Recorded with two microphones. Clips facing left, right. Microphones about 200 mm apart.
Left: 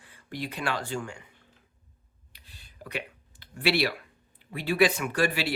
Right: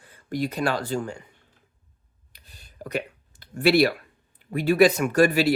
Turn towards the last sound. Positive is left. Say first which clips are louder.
# right 8 dB
turn(degrees=-45)  # may be behind; listen again after turning